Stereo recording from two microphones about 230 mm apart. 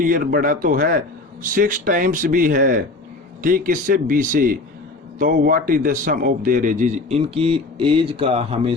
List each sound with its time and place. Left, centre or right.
0.0 s a man's voice: right